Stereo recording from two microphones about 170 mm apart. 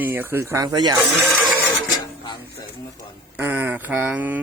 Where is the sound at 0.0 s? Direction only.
10° right (ahead or behind).